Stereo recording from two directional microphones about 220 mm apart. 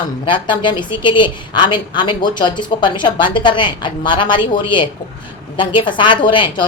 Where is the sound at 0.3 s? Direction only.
20° left (ahead or behind).